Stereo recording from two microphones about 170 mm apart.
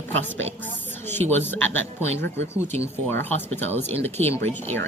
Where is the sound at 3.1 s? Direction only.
10° left (ahead or behind).